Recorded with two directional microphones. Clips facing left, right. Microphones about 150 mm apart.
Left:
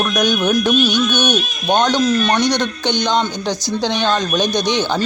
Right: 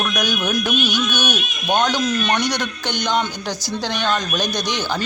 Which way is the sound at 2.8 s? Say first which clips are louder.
Left 3 dB; 5° right (ahead or behind).